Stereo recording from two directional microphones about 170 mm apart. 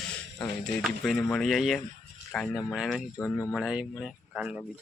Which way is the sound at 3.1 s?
15° left (ahead or behind).